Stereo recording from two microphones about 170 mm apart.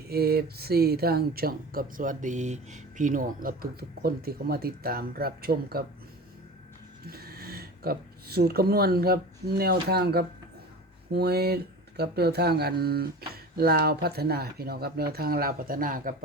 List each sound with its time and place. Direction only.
0.1 s speech: 65° right (ahead or behind)
7.1 s speech: 65° right (ahead or behind)